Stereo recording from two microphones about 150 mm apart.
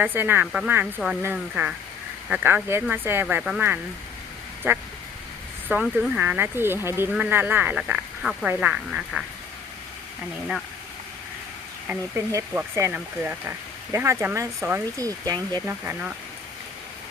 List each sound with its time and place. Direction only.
0.0 s speech: 15° right (ahead or behind)
4.7 s speech: 15° right (ahead or behind)
11.9 s speech: 20° right (ahead or behind)
15.6 s speech: 10° right (ahead or behind)